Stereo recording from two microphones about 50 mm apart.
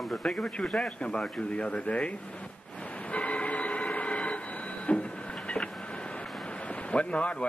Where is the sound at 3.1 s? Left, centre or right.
Left.